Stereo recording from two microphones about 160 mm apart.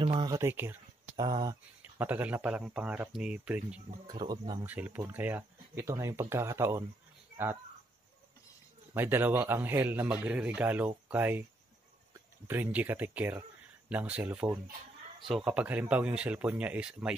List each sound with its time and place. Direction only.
0.0 s speech: 30° right (ahead or behind); by 0.7 s 15° right (ahead or behind)
1.1 s speech: 25° right (ahead or behind)
2.0 s a man's voice: 10° right (ahead or behind)
4.1 s speech: 25° right (ahead or behind)
4.6 s a man's voice: 10° right (ahead or behind)
8.9 s a man's voice: 15° right (ahead or behind)
12.4 s a man's voice: 15° right (ahead or behind)